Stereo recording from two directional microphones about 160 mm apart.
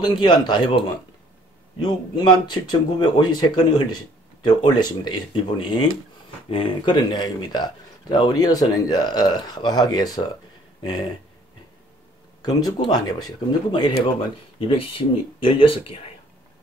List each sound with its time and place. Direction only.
0.0 s speech: 25° left (ahead or behind)
1.8 s speech: 25° left (ahead or behind)
12.4 s speech: 25° left (ahead or behind)